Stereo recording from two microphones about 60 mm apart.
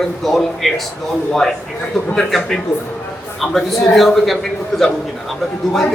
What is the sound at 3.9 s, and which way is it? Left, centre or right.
A man's voice, centre.